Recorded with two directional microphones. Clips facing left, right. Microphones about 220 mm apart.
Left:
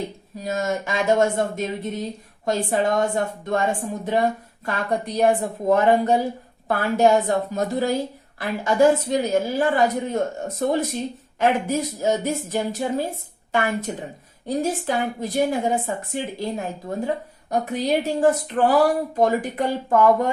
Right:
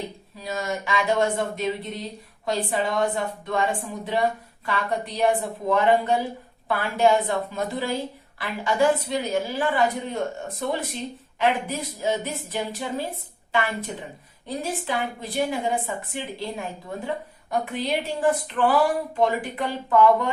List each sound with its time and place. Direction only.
0.3 s speech: 45° left (ahead or behind)